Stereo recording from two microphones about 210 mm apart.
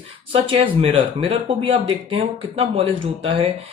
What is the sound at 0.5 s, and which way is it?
Speech, 25° right (ahead or behind).